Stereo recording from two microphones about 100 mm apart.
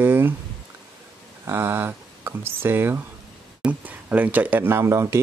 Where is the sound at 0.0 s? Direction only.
20° right (ahead or behind).